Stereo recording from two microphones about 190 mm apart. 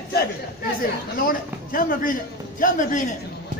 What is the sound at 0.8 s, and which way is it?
Chatter, 50° left (ahead or behind).